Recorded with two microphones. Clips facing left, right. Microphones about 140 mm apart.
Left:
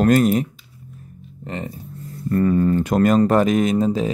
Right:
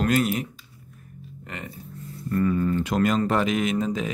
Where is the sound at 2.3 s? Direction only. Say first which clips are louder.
Left 5 dB; 40° left (ahead or behind).